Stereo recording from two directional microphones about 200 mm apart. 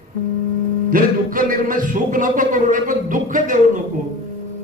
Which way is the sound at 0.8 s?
45° right (ahead or behind).